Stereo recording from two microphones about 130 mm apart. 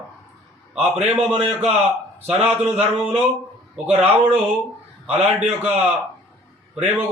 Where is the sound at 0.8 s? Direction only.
10° right (ahead or behind).